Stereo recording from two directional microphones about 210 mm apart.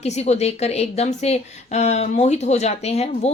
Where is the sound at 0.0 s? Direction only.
30° left (ahead or behind).